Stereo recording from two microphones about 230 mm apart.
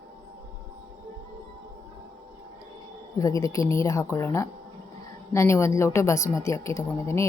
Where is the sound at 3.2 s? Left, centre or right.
Centre.